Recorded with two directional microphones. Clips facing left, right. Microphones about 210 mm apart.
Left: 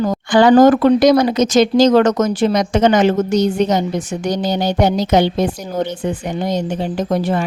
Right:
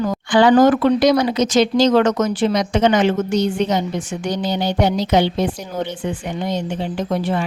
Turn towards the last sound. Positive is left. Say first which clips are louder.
# left 3 dB
turn(degrees=45)  # may be behind; listen again after turning